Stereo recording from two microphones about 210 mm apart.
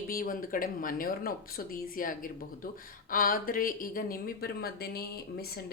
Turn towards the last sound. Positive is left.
turn(degrees=45)  # may be behind; listen again after turning